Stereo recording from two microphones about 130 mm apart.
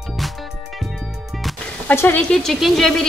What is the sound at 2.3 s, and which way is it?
Speech, 5° left (ahead or behind).